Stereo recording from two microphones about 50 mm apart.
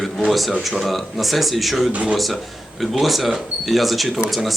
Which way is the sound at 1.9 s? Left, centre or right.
Right.